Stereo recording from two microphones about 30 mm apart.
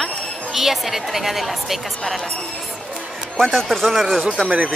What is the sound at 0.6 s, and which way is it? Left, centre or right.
A woman's voice, centre.